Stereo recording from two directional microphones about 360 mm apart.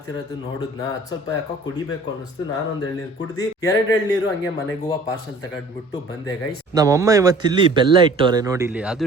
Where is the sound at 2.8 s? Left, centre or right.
Centre.